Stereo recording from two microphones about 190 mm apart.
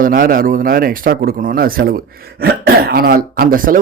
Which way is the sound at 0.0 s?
50° right (ahead or behind).